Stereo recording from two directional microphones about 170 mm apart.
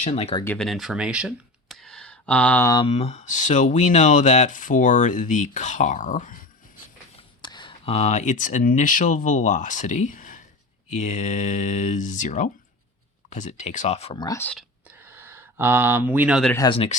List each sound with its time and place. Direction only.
0.0 s speech: 35° left (ahead or behind)
0.4 s speech: 5° left (ahead or behind)
2.8 s speech: 40° left (ahead or behind)
7.4 s speech: 25° left (ahead or behind)
14.2 s speech: 20° left (ahead or behind)
15.0 s a sound: 15° right (ahead or behind)
16.6 s speech: 30° left (ahead or behind)